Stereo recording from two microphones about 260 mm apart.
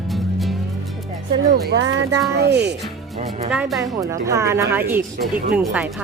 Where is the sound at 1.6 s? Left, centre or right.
Right.